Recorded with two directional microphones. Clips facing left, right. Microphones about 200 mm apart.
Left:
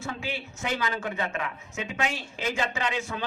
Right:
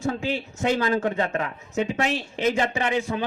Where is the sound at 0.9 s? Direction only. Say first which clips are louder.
Right 7 dB; 45° right (ahead or behind).